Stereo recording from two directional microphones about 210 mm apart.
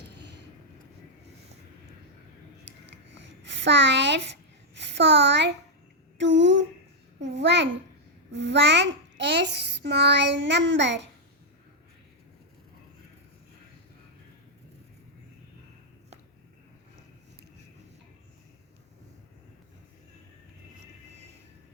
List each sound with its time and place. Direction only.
0.0 s vehicle: 55° right (ahead or behind)
3.5 s speech: 60° right (ahead or behind)
4.7 s a sound: 55° right (ahead or behind)
6.1 s a child's voice: 60° right (ahead or behind)